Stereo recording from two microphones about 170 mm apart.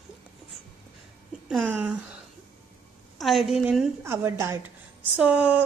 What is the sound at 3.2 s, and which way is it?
Speech, centre (ahead or behind).